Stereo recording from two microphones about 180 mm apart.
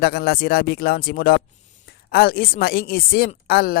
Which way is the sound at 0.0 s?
60° left (ahead or behind).